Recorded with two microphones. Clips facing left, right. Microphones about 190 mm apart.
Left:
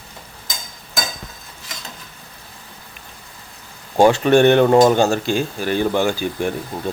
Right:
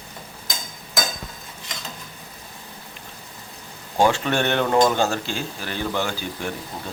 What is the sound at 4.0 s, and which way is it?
Speech, 15° left (ahead or behind).